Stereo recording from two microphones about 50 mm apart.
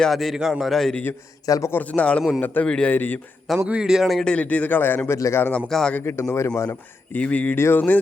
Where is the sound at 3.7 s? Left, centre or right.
Centre.